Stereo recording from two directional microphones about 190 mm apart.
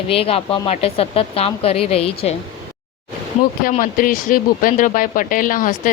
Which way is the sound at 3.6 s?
45° left (ahead or behind).